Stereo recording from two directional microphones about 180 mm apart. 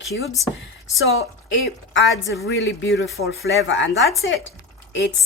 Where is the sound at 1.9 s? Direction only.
90° left.